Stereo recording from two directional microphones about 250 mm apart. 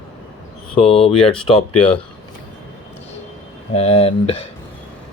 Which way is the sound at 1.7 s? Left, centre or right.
Centre.